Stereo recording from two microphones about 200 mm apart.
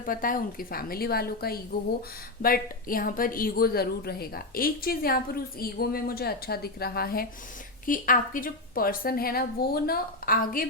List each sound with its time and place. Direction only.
0.0 s a woman's voice: 45° left (ahead or behind)